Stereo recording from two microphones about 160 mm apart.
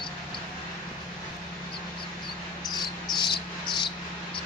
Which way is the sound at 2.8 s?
30° left (ahead or behind).